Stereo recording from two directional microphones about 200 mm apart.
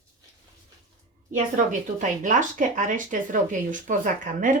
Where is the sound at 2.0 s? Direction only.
40° right (ahead or behind).